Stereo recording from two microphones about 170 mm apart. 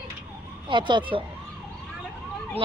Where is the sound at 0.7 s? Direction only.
30° right (ahead or behind).